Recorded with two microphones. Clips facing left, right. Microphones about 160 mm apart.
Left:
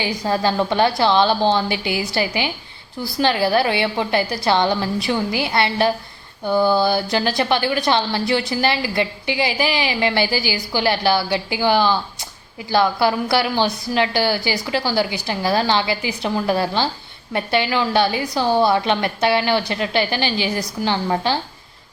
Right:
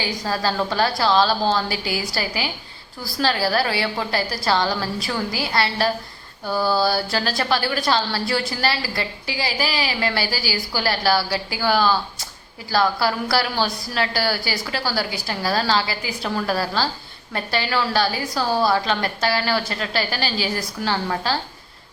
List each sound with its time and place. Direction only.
0.2 s a woman's voice: 20° left (ahead or behind)